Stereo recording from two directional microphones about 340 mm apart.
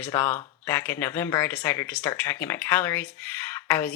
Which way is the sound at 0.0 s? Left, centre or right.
Centre.